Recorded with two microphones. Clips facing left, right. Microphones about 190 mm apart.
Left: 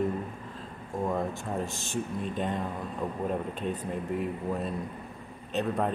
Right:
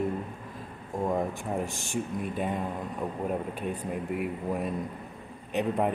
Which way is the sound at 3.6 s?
10° right (ahead or behind).